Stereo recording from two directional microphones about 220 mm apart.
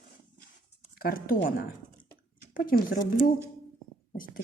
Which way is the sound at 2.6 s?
40° left (ahead or behind).